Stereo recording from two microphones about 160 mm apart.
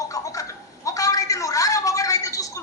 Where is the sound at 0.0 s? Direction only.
20° left (ahead or behind).